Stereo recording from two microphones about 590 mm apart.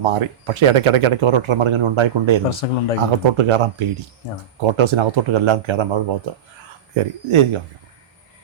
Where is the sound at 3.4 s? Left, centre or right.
Right.